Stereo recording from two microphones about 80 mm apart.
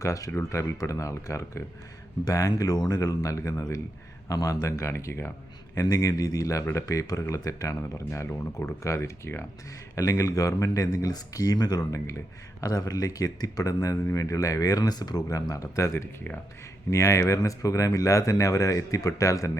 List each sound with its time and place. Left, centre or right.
0.0 s speech: left
5.7 s speech: left